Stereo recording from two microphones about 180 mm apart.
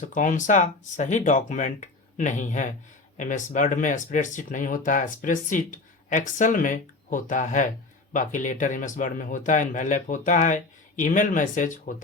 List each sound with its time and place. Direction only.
0.0 s speech: 45° left (ahead or behind)